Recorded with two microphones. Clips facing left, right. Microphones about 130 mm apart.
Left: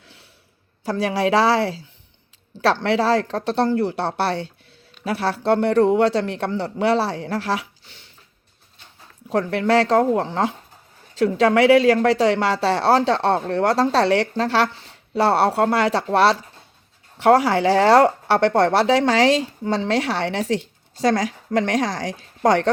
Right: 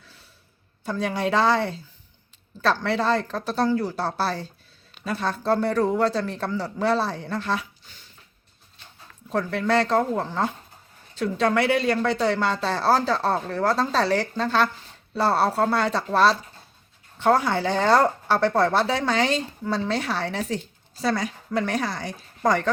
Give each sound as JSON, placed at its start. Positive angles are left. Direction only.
{"t": 0.0, "sound": "a sound", "side_deg": 75}
{"t": 0.9, "sound": "speech", "side_deg": 90}
{"t": 2.8, "sound": "speech", "side_deg": 90}
{"t": 3.6, "sound": "speech", "side_deg": 60}
{"t": 5.5, "sound": "speech", "side_deg": 70}
{"t": 9.3, "sound": "speech", "side_deg": 85}
{"t": 12.6, "sound": "speech", "side_deg": 80}
{"t": 17.2, "sound": "speech", "side_deg": 85}
{"t": 21.0, "sound": "speech", "side_deg": 90}